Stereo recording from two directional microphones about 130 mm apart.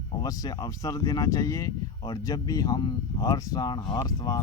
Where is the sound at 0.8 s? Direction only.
25° left (ahead or behind).